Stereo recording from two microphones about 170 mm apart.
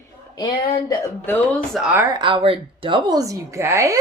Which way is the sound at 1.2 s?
10° left (ahead or behind).